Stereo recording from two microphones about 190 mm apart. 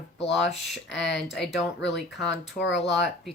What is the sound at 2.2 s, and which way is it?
Speech, 70° left (ahead or behind).